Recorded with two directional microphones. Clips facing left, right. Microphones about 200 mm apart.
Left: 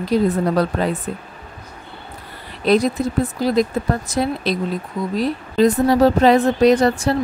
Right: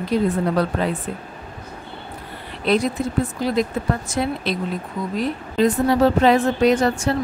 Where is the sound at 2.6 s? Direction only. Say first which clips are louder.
Left 3 dB; 40° left (ahead or behind).